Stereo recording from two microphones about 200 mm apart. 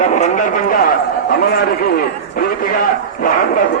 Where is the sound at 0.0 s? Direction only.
40° left (ahead or behind).